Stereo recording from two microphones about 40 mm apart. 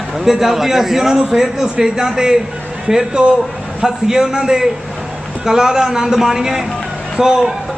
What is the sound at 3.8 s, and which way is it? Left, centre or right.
A man's voice, centre.